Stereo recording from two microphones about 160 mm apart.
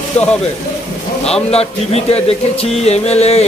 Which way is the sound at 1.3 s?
40° left (ahead or behind).